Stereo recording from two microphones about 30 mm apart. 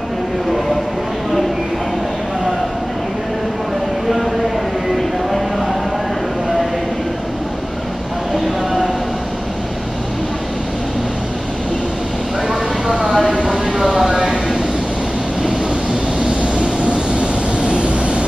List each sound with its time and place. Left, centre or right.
4.9 s music: centre
12.9 s a sound: right
16.5 s vehicle: right